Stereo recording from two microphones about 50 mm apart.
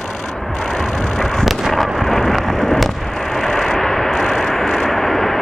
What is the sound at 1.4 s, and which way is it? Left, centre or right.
Artillery fire, centre.